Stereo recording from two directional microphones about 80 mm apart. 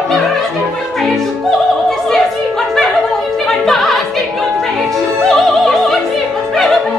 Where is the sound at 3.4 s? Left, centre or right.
Centre.